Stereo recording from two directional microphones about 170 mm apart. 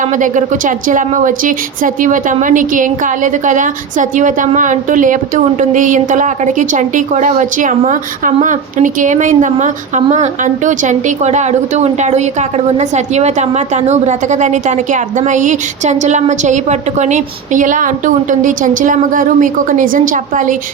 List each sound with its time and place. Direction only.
0.2 s a woman's voice: 50° right (ahead or behind)